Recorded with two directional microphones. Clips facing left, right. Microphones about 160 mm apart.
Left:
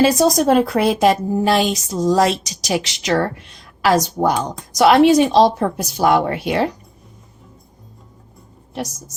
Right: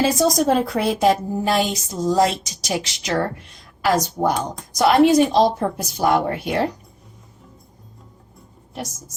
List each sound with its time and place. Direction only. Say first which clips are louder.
0.0 s a woman's voice: left 4 dB; 70° left (ahead or behind); by 6.7 s 90° left